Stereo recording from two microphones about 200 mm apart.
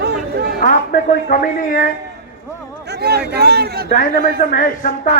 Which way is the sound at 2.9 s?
55° right (ahead or behind).